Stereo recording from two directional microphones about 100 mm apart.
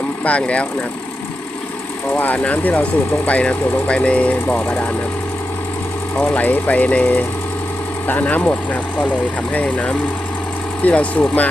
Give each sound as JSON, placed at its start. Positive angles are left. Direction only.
{"t": 0.3, "sound": "speech", "side_deg": 10}
{"t": 2.1, "sound": "speech", "side_deg": 15}
{"t": 6.1, "sound": "speech", "side_deg": 15}